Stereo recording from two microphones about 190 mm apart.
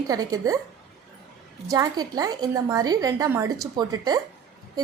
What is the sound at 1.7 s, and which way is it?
A woman's voice, 20° right (ahead or behind).